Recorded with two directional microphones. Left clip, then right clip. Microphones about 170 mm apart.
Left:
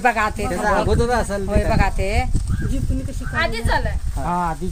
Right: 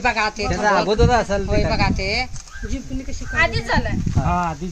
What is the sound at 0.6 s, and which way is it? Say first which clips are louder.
Speech: right 2 dB; 60° right (ahead or behind).